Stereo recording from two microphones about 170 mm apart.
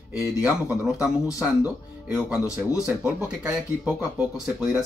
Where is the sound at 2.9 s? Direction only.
5° right (ahead or behind).